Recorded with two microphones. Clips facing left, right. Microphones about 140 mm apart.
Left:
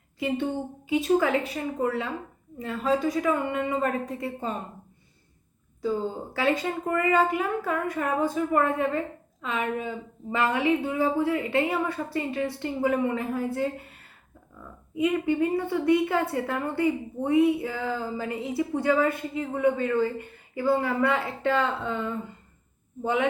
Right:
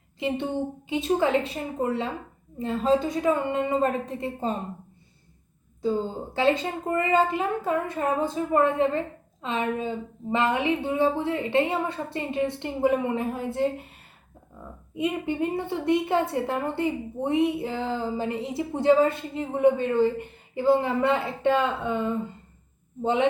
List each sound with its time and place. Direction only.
0.2 s a woman's voice: 20° right (ahead or behind)
6.3 s a woman's voice: 25° right (ahead or behind)